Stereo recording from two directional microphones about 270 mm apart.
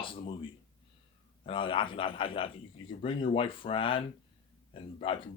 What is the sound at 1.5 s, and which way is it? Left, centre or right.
Speech, centre.